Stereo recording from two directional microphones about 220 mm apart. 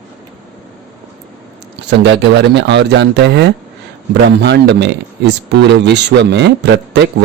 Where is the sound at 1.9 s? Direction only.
50° right (ahead or behind).